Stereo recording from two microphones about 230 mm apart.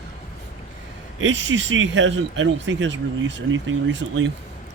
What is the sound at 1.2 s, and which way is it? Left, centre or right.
Speech, right.